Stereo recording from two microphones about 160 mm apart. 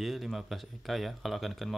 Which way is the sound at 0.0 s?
Centre (ahead or behind).